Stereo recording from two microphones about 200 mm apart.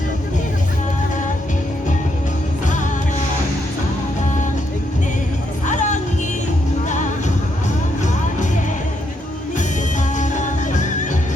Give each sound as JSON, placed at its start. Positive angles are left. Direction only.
{"t": 5.6, "sound": "music", "side_deg": 40}
{"t": 10.2, "sound": "music", "side_deg": 40}